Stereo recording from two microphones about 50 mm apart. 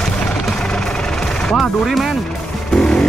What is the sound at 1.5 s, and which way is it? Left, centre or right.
Speech, centre.